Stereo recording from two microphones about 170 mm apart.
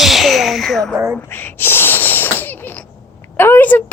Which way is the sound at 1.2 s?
15° left (ahead or behind).